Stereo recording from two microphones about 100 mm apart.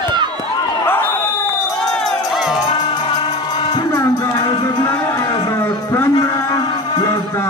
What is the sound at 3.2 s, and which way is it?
Music, 50° left (ahead or behind).